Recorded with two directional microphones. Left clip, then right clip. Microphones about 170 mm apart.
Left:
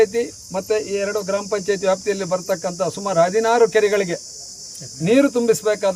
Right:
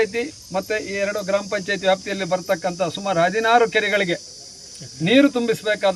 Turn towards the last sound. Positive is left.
turn(degrees=20)  # may be behind; listen again after turning